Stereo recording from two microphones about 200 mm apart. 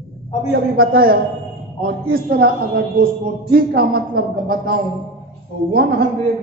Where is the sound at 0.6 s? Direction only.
45° right (ahead or behind).